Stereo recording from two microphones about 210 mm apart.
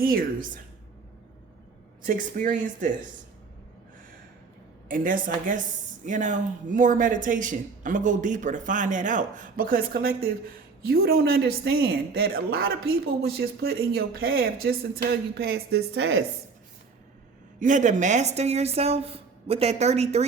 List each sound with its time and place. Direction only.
0.0 s speech: 45° right (ahead or behind)
2.0 s speech: 40° right (ahead or behind)
4.9 s speech: 40° right (ahead or behind); by 16.2 s 60° right (ahead or behind)
17.6 s speech: 35° right (ahead or behind)